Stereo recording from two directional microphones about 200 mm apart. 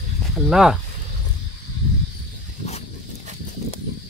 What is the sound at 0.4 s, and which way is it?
Speech, centre (ahead or behind).